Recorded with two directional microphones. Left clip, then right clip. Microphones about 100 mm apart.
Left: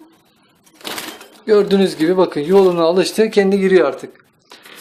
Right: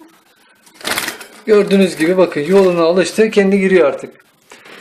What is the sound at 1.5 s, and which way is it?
Speech, 15° left (ahead or behind).